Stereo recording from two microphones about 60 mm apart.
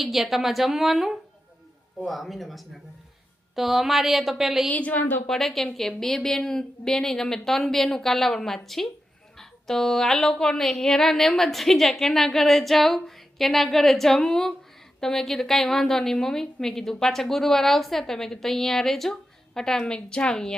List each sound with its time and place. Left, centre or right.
0.0 s speech: centre
4.7 s a woman's voice: left
5.3 s a woman's voice: centre